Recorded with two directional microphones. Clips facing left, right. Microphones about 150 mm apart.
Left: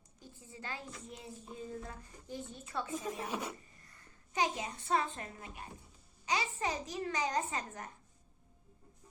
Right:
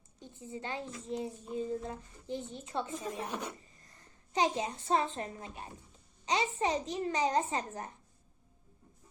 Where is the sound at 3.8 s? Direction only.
25° right (ahead or behind).